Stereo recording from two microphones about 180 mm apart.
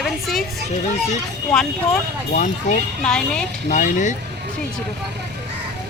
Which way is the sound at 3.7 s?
45° left (ahead or behind).